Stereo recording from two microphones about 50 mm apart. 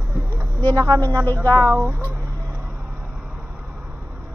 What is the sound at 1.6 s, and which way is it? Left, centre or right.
Speech, right.